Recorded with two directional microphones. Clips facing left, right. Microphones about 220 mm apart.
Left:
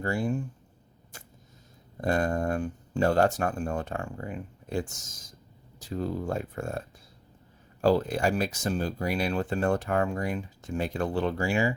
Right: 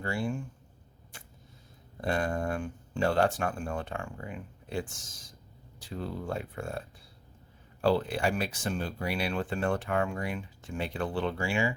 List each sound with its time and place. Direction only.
0.0 s speech: 40° left (ahead or behind)
2.0 s speech: 40° left (ahead or behind)